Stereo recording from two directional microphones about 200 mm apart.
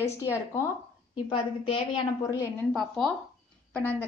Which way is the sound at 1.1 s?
25° left (ahead or behind).